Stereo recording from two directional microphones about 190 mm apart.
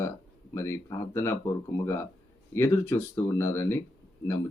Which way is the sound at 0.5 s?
15° left (ahead or behind).